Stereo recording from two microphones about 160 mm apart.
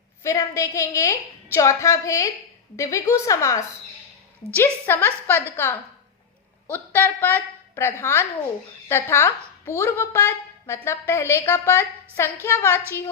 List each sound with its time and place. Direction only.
0.2 s a woman's voice: 20° left (ahead or behind)